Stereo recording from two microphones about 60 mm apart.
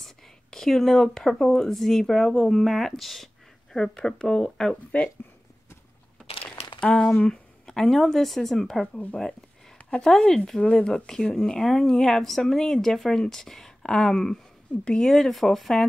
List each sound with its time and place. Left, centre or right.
0.0 s speech: centre
6.8 s speech: centre
8.9 s speech: centre